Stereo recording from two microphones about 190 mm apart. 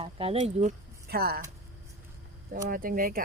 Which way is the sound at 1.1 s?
55° right (ahead or behind).